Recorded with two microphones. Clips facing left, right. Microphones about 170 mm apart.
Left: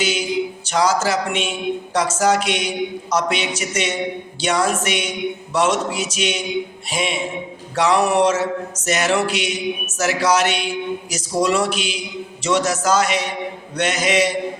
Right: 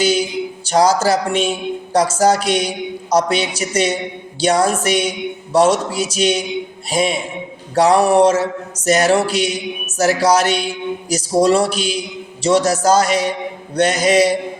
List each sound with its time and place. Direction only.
0.7 s speech: 35° right (ahead or behind)